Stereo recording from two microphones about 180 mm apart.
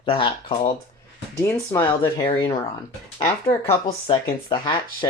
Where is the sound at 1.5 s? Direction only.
10° left (ahead or behind).